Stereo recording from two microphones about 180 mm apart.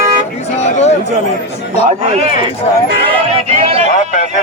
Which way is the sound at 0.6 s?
40° left (ahead or behind).